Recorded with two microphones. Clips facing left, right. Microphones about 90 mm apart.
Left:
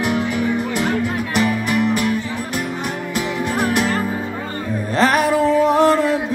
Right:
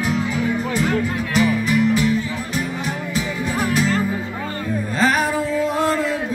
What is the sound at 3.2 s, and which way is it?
Music, 60° left (ahead or behind).